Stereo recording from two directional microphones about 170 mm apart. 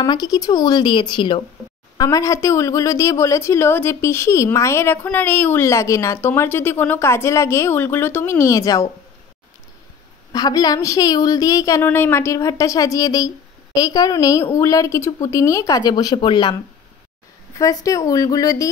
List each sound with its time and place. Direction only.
0.0 s a woman's voice: 25° left (ahead or behind)
10.3 s a woman's voice: 25° left (ahead or behind)
17.6 s a woman's voice: 20° left (ahead or behind)